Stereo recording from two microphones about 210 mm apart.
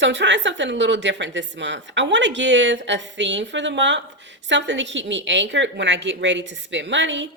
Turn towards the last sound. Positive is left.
turn(degrees=-60)  # may be behind; listen again after turning